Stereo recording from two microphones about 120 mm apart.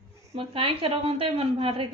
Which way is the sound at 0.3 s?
50° right (ahead or behind).